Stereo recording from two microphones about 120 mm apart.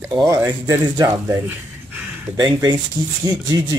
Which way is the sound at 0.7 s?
30° right (ahead or behind).